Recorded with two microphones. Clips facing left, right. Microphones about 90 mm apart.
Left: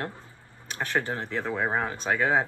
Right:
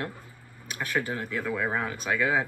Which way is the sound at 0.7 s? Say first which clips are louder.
Left 1 dB; 30° left (ahead or behind).